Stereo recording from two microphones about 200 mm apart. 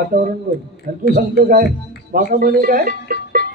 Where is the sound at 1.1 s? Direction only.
45° right (ahead or behind).